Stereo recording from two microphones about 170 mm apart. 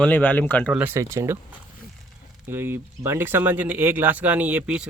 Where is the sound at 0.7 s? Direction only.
10° right (ahead or behind).